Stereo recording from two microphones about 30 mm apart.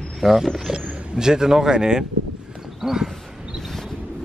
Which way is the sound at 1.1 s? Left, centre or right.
Right.